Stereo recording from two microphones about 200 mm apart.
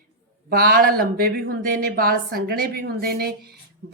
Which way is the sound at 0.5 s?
50° right (ahead or behind).